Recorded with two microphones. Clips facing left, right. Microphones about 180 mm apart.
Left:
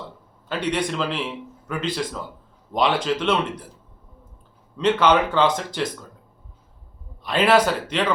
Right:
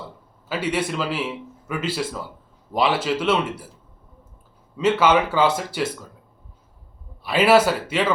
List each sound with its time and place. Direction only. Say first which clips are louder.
0.4 s a man's voice: even; 5° right (ahead or behind)
4.8 s a man's voice: even; 5° right (ahead or behind)
7.3 s a man's voice: right 2 dB; 5° right (ahead or behind)